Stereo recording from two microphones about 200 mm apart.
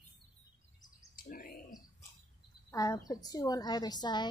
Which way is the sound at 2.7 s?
15° left (ahead or behind).